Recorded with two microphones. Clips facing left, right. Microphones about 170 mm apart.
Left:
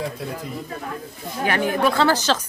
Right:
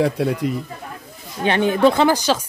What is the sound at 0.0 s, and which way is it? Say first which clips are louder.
Speech: right 10 dB; 75° right (ahead or behind).